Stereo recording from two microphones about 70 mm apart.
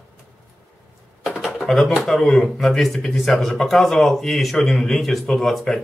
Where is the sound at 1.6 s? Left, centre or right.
Centre.